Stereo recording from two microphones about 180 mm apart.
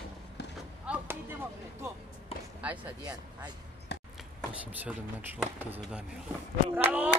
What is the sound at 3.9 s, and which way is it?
Chopping, 70° left (ahead or behind).